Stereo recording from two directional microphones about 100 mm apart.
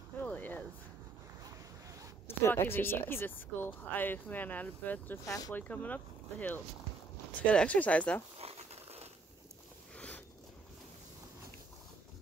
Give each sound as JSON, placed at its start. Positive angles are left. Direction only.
{"t": 0.2, "sound": "a sound", "side_deg": 15}
{"t": 2.2, "sound": "speech", "side_deg": 25}
{"t": 5.2, "sound": "speech", "side_deg": 35}
{"t": 5.5, "sound": "speech", "side_deg": 15}
{"t": 7.4, "sound": "speech", "side_deg": 15}
{"t": 8.4, "sound": "crumpling", "side_deg": -90}
{"t": 9.9, "sound": "a sound", "side_deg": 15}